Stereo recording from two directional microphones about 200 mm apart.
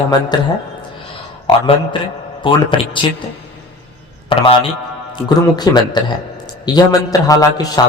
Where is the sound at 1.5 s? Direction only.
25° left (ahead or behind).